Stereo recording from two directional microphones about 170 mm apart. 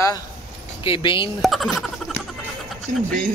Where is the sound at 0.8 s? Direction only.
30° left (ahead or behind).